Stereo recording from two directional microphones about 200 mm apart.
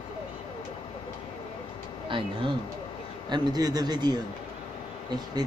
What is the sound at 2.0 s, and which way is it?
A man's voice, 25° right (ahead or behind).